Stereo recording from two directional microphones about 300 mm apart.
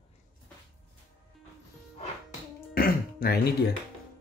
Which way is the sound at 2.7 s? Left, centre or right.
Left.